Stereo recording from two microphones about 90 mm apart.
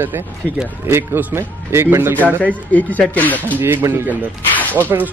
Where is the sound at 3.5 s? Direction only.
25° right (ahead or behind).